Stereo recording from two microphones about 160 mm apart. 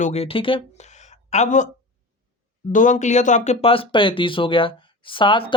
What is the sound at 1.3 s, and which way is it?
Speech, 50° left (ahead or behind).